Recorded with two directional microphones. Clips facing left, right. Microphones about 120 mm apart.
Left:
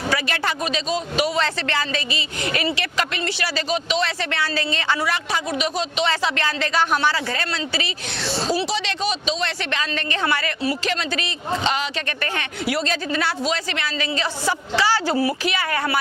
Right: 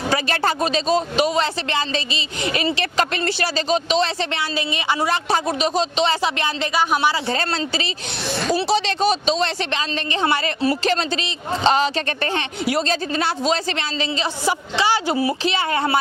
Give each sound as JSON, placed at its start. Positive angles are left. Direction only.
{"t": 0.1, "sound": "a man's voice", "side_deg": -35}
{"t": 5.0, "sound": "a man's voice", "side_deg": -30}
{"t": 7.3, "sound": "a man's voice", "side_deg": -30}